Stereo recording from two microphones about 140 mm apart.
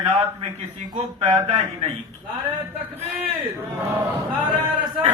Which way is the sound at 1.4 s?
45° right (ahead or behind).